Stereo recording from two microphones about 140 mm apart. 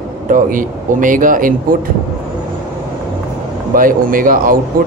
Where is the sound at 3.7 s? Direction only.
80° right.